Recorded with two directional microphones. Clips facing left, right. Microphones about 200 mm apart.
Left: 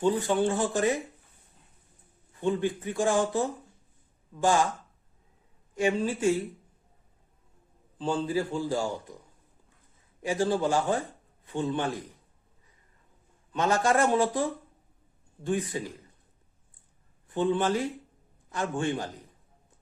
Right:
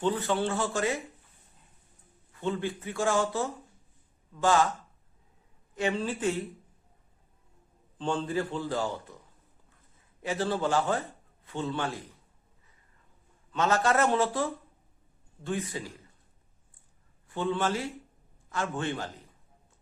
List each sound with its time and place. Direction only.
0.0 s speech: 15° left (ahead or behind)
2.3 s speech: 15° left (ahead or behind)
5.7 s speech: 10° left (ahead or behind)
7.9 s speech: 5° left (ahead or behind)
10.2 s speech: 15° left (ahead or behind)
13.5 s speech: 15° left (ahead or behind)
17.2 s speech: 15° left (ahead or behind)